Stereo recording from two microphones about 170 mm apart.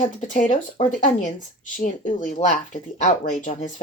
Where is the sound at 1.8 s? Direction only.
50° left (ahead or behind).